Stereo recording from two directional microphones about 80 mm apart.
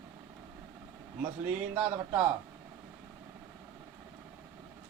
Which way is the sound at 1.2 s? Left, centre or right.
Right.